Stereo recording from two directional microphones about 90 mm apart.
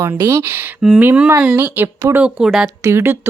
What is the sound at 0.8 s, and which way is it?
Speech, 10° right (ahead or behind).